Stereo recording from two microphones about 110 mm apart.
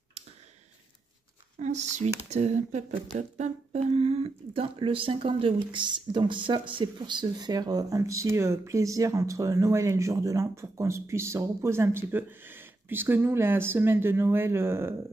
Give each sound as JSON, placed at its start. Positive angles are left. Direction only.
{"t": 1.6, "sound": "speech", "side_deg": -90}